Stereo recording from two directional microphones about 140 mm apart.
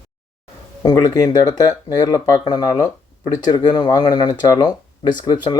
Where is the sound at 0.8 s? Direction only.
30° left (ahead or behind).